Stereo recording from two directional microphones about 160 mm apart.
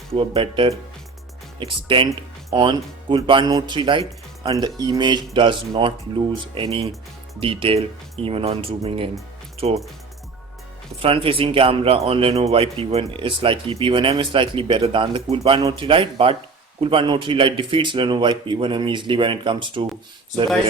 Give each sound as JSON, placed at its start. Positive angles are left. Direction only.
{"t": 0.1, "sound": "speech", "side_deg": -35}
{"t": 11.0, "sound": "speech", "side_deg": -35}